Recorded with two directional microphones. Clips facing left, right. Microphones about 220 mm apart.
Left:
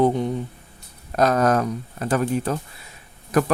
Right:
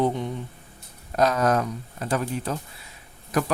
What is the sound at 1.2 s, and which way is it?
Speech, 50° left (ahead or behind).